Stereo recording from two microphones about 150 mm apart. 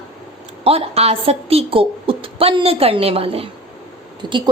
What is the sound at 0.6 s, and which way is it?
A woman's voice, 40° right (ahead or behind).